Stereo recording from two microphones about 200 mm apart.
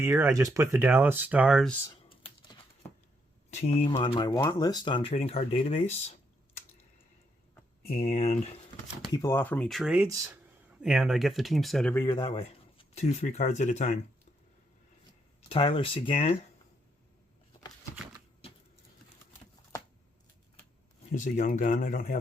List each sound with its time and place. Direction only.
0.0 s speech: 15° right (ahead or behind)
1.9 s computer keyboard: 25° left (ahead or behind)
3.5 s speech: 30° left (ahead or behind)
7.9 s speech: 30° left (ahead or behind)
9.1 s speech: 15° left (ahead or behind)
12.0 s speech: 25° left (ahead or behind)
15.4 s speech: 25° left (ahead or behind)
18.4 s a sound: 30° left (ahead or behind)
21.1 s speech: 40° left (ahead or behind)